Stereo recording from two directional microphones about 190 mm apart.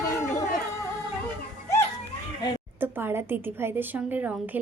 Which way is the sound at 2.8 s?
10° right (ahead or behind).